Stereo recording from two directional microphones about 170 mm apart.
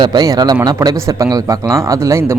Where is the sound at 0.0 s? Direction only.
25° right (ahead or behind).